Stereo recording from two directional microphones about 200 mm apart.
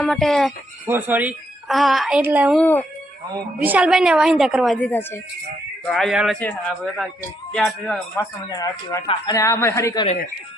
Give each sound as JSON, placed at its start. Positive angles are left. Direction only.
{"t": 0.0, "sound": "a woman's voice", "side_deg": 0}
{"t": 0.9, "sound": "a woman's voice", "side_deg": -10}
{"t": 2.6, "sound": "speech", "side_deg": 10}
{"t": 3.3, "sound": "a woman's voice", "side_deg": -10}
{"t": 8.2, "sound": "speech", "side_deg": 20}